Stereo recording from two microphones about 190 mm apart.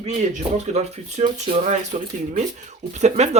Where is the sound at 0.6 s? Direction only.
35° right (ahead or behind).